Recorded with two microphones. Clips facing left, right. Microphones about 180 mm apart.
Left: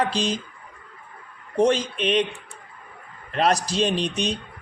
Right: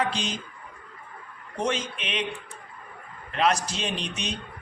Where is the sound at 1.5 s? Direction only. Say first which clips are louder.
Left 8 dB; 35° left (ahead or behind).